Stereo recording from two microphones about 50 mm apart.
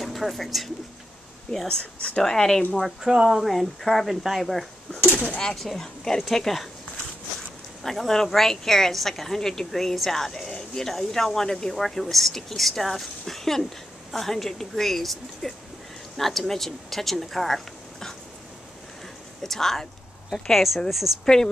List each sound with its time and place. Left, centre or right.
0.0 s speech: centre
1.7 s a woman's voice: centre
3.0 s speech: centre
3.4 s speech: centre
5.0 s speech: centre
5.4 s a woman's voice: centre
7.8 s a woman's voice: centre
19.4 s speech: centre
21.1 s speech: centre